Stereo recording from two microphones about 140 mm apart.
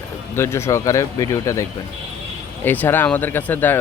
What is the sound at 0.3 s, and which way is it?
Speech, 20° left (ahead or behind).